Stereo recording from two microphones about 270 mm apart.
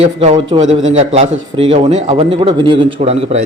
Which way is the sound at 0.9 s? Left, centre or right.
Right.